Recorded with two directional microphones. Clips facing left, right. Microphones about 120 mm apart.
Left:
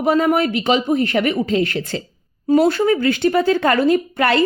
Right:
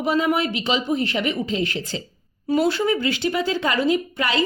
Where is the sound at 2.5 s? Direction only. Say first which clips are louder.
Left 5 dB; 50° left (ahead or behind).